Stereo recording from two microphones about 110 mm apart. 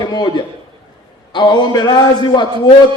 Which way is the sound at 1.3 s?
40° left (ahead or behind).